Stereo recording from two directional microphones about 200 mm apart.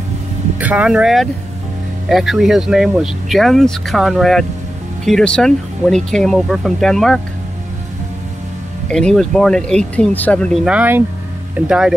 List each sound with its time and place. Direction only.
0.6 s speech: 5° right (ahead or behind)
8.8 s speech: 5° left (ahead or behind)